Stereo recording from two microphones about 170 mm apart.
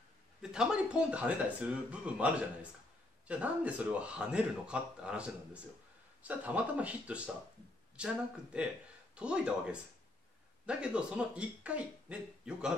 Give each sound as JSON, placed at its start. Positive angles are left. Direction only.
{"t": 0.4, "sound": "speech", "side_deg": -5}